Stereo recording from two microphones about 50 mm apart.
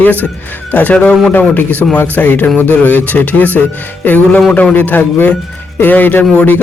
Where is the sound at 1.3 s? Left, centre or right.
Left.